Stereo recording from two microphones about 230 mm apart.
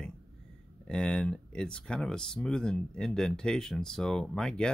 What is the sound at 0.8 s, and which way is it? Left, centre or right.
Speech, centre.